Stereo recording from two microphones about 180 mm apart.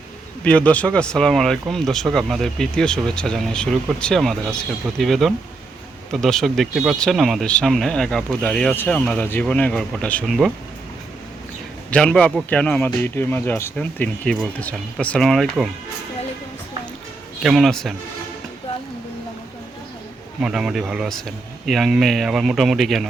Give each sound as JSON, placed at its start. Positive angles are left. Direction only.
{"t": 0.4, "sound": "speech", "side_deg": 5}
{"t": 11.9, "sound": "a man's voice", "side_deg": 5}
{"t": 17.4, "sound": "speech", "side_deg": 0}
{"t": 20.4, "sound": "speech", "side_deg": -5}